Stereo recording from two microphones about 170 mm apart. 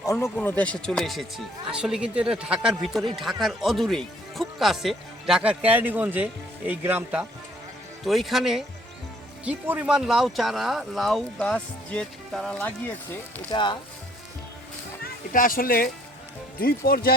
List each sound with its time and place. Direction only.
0.0 s speech: 20° left (ahead or behind)
13.5 s speech: 30° left (ahead or behind)
15.0 s speech: 55° left (ahead or behind)